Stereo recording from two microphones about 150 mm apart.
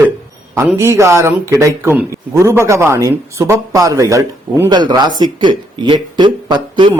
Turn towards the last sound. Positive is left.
turn(degrees=-30)  # may be behind; listen again after turning